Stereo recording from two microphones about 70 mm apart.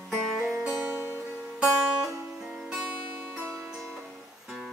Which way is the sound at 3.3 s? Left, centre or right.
Right.